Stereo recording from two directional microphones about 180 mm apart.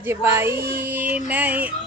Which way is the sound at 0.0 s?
15° right (ahead or behind).